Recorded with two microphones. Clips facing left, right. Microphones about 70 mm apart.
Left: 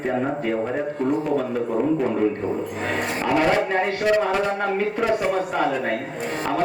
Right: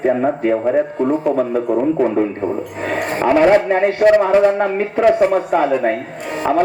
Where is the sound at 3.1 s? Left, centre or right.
Right.